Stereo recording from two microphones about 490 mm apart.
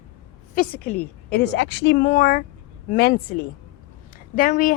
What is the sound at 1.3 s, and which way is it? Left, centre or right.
A woman's voice, centre.